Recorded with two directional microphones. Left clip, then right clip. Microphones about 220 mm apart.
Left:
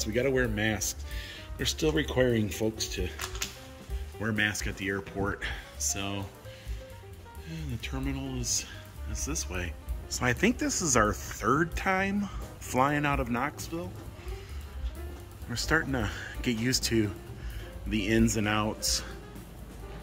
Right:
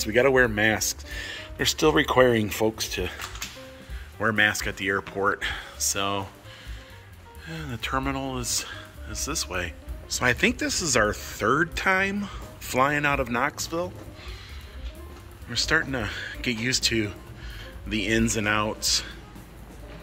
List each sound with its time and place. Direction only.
0.0 s speech: 5° left (ahead or behind)
4.2 s speech: 10° left (ahead or behind)
7.4 s speech: 5° left (ahead or behind)
15.5 s speech: 20° left (ahead or behind)